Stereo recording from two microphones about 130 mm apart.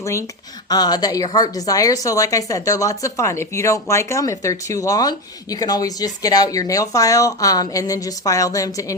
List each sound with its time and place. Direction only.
0.0 s a woman's voice: 25° left (ahead or behind)